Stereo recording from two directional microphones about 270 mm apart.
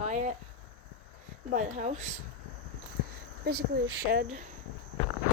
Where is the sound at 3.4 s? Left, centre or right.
Right.